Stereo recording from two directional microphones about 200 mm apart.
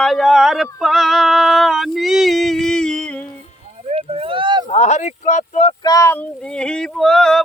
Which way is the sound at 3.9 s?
30° right (ahead or behind).